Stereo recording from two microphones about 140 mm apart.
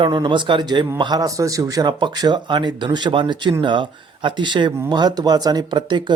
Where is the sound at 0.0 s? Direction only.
35° right (ahead or behind).